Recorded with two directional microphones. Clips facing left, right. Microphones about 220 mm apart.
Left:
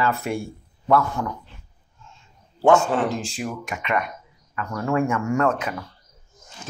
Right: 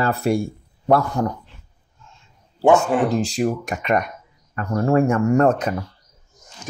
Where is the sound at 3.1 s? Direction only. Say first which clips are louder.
Right 8 dB; 40° right (ahead or behind).